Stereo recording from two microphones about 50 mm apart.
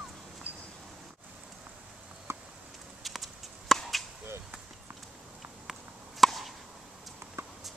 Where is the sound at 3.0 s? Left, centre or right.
Centre.